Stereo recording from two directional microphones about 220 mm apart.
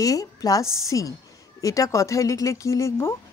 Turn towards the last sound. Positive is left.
turn(degrees=10)  # may be behind; listen again after turning